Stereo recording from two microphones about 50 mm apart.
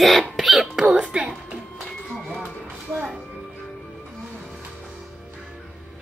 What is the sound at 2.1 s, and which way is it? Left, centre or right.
Music, centre.